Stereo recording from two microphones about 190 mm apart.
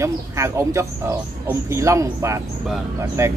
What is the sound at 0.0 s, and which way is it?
Speech, 15° right (ahead or behind).